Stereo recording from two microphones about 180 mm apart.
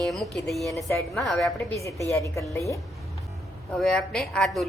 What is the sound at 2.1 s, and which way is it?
Speech, 15° left (ahead or behind).